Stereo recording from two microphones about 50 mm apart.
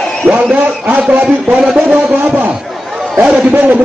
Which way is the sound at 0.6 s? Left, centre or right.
Right.